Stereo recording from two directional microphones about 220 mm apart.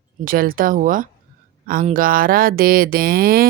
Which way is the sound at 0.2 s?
40° right (ahead or behind).